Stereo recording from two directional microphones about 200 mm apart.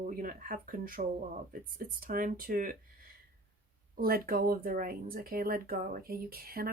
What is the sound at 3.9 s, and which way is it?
Speech, 45° right (ahead or behind).